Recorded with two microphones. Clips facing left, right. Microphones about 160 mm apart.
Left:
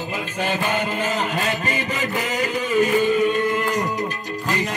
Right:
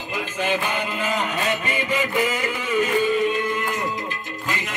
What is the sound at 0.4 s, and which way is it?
Music, 40° left (ahead or behind).